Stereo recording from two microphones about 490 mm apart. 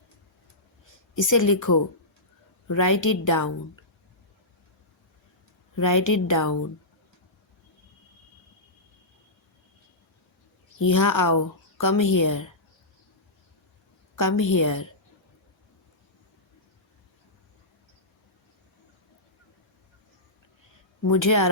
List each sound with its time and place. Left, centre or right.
1.1 s a woman's voice: left
5.7 s a woman's voice: left
10.8 s a woman's voice: left
14.2 s a woman's voice: left
21.0 s a woman's voice: left